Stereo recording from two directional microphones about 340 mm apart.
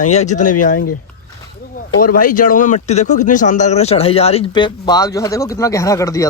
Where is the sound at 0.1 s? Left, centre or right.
Centre.